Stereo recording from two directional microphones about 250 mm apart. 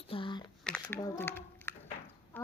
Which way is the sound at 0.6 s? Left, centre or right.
Centre.